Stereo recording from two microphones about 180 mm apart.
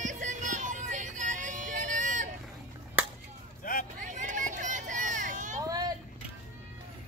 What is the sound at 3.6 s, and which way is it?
Vehicle, 50° left (ahead or behind).